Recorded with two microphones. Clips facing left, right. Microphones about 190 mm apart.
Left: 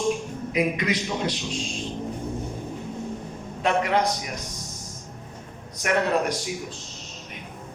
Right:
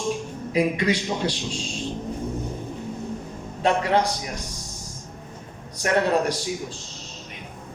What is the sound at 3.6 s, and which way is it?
Speech, 30° right (ahead or behind).